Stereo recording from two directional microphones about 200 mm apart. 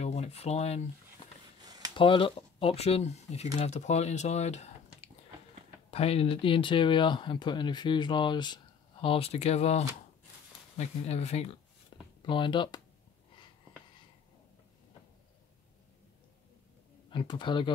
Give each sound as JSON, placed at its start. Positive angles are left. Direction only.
{"t": 0.0, "sound": "a sound", "side_deg": 30}
{"t": 2.0, "sound": "speech", "side_deg": 25}
{"t": 17.1, "sound": "speech", "side_deg": 25}